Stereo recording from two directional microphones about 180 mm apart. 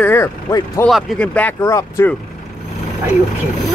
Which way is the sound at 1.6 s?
20° left (ahead or behind).